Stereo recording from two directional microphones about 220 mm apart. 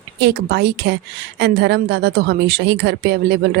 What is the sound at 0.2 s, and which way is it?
Speech, 50° right (ahead or behind).